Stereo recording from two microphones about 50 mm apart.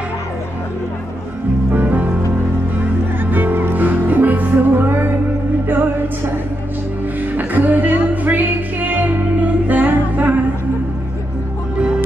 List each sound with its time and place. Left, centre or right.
1.7 s music: right
3.3 s music: right
7.3 s music: right